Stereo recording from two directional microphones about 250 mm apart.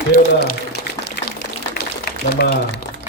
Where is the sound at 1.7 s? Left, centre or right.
Left.